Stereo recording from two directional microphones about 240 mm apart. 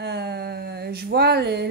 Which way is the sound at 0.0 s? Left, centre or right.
Right.